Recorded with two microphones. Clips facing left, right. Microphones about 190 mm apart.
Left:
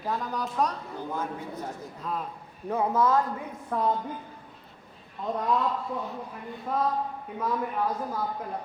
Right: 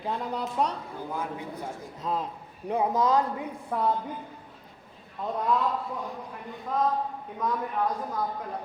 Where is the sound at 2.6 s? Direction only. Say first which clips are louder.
Even; 15° right (ahead or behind).